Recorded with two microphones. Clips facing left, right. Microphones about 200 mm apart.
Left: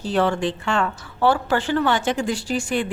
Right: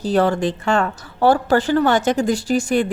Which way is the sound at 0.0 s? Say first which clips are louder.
Right 3 dB; 40° right (ahead or behind).